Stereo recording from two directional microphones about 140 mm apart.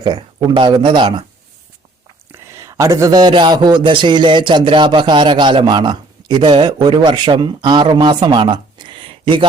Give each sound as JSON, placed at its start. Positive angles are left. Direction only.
{"t": 0.0, "sound": "a man's voice", "side_deg": -35}
{"t": 2.3, "sound": "a man's voice", "side_deg": -20}